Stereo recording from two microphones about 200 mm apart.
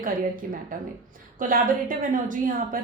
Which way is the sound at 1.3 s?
45° right (ahead or behind).